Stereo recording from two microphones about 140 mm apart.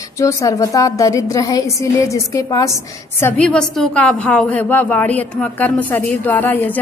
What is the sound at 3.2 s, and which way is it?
A woman's voice, 10° left (ahead or behind).